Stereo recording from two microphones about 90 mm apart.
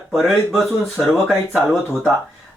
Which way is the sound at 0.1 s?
Centre (ahead or behind).